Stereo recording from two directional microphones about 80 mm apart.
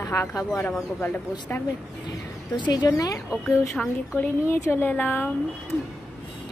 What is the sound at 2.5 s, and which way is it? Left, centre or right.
Speech, left.